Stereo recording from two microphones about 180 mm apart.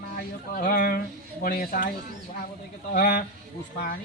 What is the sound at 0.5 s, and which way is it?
A man's voice, 50° left (ahead or behind).